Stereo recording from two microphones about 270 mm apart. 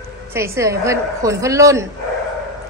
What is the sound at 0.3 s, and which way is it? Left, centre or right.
A woman's voice, centre.